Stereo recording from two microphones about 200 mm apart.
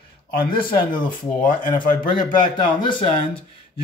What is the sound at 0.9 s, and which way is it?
Speech, 25° left (ahead or behind).